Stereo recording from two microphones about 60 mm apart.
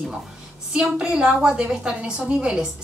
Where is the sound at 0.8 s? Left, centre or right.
Centre.